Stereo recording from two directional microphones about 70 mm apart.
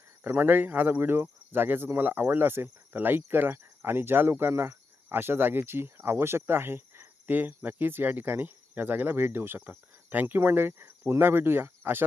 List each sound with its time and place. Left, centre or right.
0.3 s speech: right